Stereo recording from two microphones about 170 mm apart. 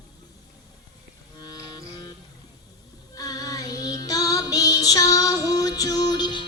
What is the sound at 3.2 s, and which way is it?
Child singing, 20° left (ahead or behind).